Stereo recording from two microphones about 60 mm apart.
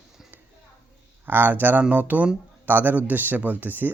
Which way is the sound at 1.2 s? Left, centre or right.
Right.